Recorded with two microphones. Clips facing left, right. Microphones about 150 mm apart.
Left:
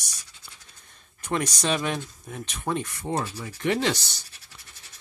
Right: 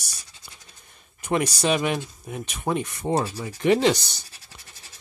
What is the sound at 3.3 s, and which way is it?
Rub, 30° right (ahead or behind).